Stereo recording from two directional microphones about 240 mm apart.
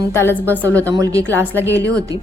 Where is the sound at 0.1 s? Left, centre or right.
Centre.